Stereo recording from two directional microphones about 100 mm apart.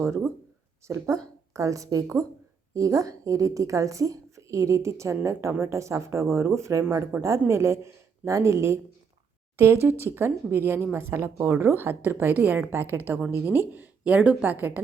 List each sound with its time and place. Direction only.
0.0 s a woman's voice: 25° right (ahead or behind)